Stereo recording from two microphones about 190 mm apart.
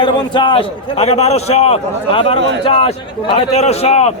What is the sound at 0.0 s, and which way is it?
A man's voice, 25° left (ahead or behind).